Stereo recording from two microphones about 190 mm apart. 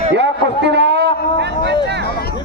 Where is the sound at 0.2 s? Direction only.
65° right (ahead or behind).